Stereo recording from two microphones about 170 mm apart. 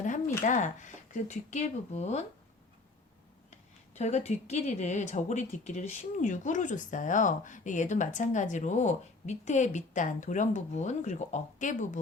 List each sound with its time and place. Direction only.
0.0 s speech: 45° left (ahead or behind)
3.5 s speech: 40° left (ahead or behind)